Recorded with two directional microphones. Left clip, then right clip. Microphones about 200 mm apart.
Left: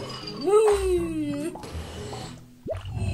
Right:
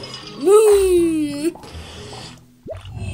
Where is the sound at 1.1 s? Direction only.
60° right (ahead or behind).